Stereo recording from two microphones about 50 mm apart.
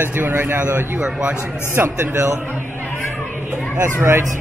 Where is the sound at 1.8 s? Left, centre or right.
Right.